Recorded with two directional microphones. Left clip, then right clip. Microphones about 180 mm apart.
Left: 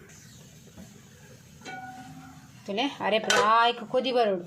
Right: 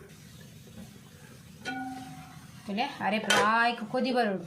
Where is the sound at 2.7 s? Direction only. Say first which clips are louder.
Left 4 dB; 35° left (ahead or behind).